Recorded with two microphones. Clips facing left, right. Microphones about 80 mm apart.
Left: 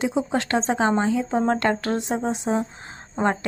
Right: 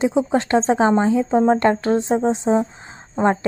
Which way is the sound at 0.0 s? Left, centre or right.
Right.